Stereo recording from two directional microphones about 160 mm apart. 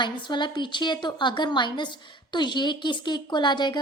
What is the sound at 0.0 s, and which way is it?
A woman's voice, 30° left (ahead or behind).